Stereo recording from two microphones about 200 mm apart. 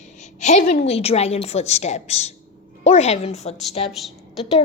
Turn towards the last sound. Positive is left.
turn(degrees=0)  # may be behind; listen again after turning